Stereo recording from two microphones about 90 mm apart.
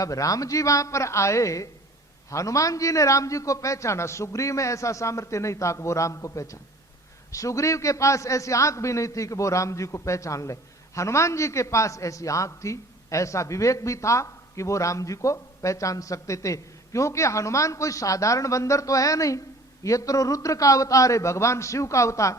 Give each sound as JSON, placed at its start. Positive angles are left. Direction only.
{"t": 0.0, "sound": "a man's voice", "side_deg": 40}